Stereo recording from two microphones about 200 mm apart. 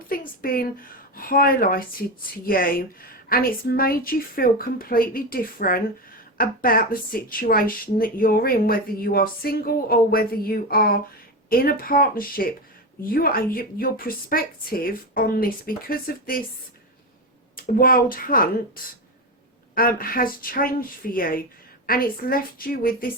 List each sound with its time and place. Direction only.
0.1 s a woman's voice: 45° left (ahead or behind)
17.6 s speech: 45° left (ahead or behind)
19.7 s speech: 45° left (ahead or behind)